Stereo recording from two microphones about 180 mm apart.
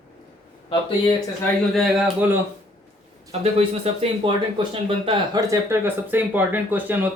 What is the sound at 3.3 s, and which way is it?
Speech, 35° right (ahead or behind).